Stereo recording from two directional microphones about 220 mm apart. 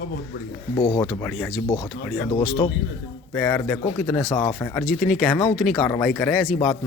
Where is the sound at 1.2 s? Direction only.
Centre (ahead or behind).